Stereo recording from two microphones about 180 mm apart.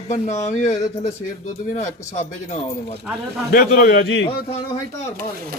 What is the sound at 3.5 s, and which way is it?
Speech, 55° left (ahead or behind).